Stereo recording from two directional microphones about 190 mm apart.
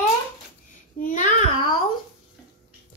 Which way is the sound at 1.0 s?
40° left (ahead or behind).